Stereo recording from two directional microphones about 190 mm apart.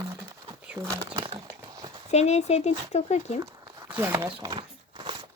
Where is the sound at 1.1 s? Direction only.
30° right (ahead or behind).